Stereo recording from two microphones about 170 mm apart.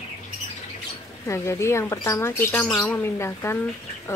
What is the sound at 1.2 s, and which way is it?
Speech, 15° left (ahead or behind).